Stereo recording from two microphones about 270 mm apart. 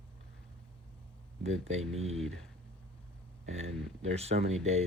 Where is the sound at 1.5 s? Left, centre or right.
Right.